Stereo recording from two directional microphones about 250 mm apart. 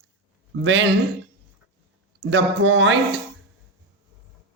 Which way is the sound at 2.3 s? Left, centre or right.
Right.